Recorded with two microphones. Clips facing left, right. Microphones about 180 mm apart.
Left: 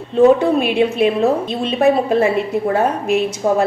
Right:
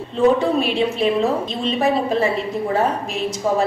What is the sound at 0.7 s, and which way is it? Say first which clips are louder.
Speech: left 3 dB; 60° left (ahead or behind).